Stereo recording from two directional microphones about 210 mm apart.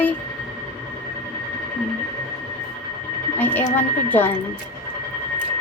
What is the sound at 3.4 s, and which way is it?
Speech, 10° left (ahead or behind).